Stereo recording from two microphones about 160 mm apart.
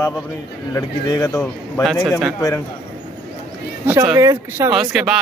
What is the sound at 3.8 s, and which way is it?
Speech, 15° right (ahead or behind).